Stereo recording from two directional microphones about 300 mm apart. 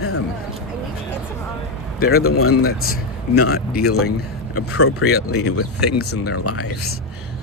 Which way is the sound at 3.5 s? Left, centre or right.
Left.